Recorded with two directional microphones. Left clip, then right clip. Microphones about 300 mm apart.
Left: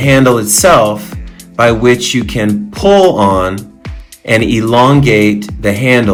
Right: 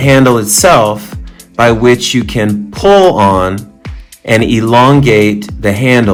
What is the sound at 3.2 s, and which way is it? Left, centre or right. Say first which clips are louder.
Speech: right 1 dB; centre.